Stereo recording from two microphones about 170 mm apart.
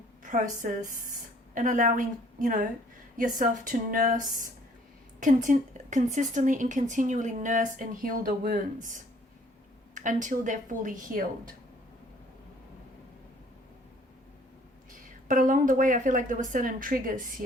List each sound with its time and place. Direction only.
0.6 s a woman's voice: 50° right (ahead or behind)
15.3 s a woman's voice: 50° right (ahead or behind)